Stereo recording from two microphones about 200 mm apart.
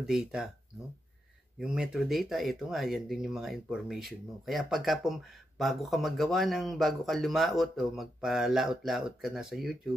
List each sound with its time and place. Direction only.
0.0 s speech: 5° right (ahead or behind)
1.6 s speech: 5° right (ahead or behind)